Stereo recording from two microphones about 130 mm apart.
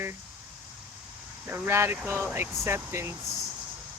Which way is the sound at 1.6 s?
20° right (ahead or behind).